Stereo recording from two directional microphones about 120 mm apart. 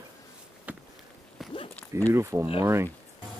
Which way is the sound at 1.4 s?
Centre (ahead or behind).